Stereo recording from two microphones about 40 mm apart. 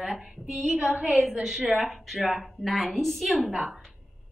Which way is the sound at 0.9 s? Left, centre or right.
Right.